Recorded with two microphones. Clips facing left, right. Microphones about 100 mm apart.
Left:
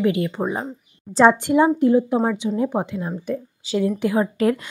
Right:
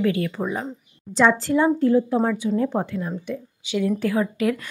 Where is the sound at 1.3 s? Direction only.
20° left (ahead or behind).